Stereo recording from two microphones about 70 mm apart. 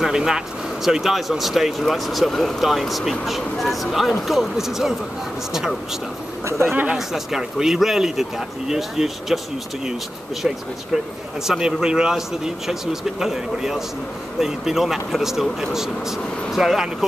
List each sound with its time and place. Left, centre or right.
0.0 s speech: centre
6.6 s speech: right
6.9 s speech: centre
11.4 s a man's voice: centre